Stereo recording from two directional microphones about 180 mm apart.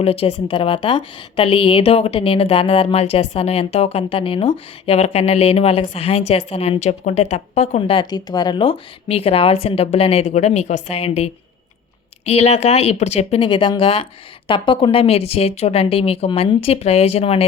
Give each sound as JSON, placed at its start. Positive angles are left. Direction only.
{"t": 0.0, "sound": "a woman's voice", "side_deg": 35}